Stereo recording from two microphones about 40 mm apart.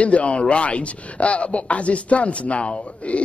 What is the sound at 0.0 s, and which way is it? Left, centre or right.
A man's voice, left.